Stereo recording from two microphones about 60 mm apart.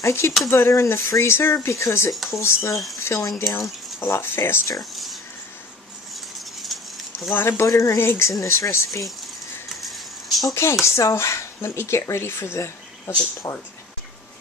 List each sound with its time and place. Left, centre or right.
0.0 s speech: left
4.0 s speech: left
4.9 s a sound: centre
6.7 s a sound: centre
7.3 s speech: left
7.6 s speech: left
8.0 s speech: left
8.3 s speech: left
9.8 s vehicle: centre
10.5 s speech: left
13.4 s speech: left